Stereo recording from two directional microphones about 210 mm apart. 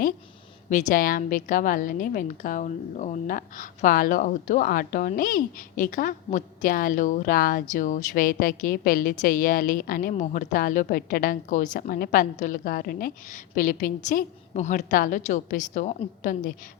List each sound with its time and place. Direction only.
0.7 s a woman's voice: 35° left (ahead or behind)